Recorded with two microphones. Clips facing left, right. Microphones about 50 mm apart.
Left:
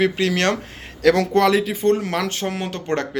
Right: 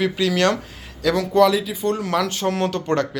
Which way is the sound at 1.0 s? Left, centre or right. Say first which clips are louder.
Left 1 dB; left.